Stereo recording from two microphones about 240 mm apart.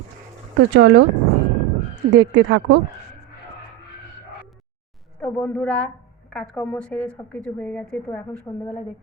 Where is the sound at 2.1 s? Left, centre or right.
Right.